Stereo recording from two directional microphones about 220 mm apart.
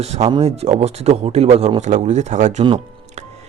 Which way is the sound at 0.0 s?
30° right (ahead or behind).